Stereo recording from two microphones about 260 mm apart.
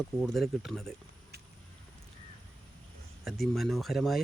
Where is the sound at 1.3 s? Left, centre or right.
Right.